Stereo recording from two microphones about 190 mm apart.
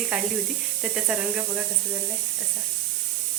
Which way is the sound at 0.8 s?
5° right (ahead or behind).